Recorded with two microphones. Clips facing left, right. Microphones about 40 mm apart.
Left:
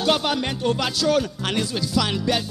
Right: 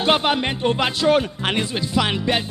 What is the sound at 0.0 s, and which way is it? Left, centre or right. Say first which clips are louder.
Music: right 3 dB; right.